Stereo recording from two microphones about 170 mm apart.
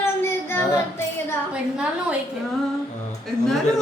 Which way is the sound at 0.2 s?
15° left (ahead or behind).